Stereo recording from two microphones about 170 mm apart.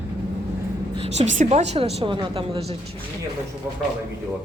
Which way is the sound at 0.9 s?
40° right (ahead or behind).